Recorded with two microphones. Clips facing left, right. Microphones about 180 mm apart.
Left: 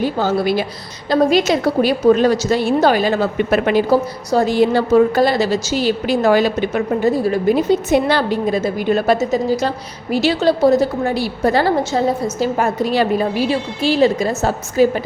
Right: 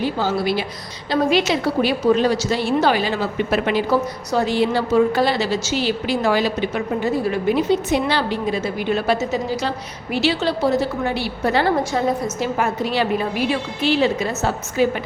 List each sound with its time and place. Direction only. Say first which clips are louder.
0.0 s a woman's voice: left 4 dB; 45° left (ahead or behind)